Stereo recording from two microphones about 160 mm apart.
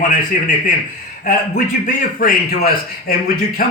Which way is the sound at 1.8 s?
60° left (ahead or behind).